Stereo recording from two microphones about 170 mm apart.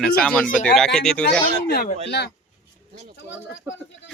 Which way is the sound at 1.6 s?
70° left (ahead or behind).